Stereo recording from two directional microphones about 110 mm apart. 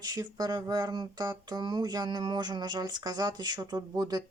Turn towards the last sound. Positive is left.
turn(degrees=-35)  # may be behind; listen again after turning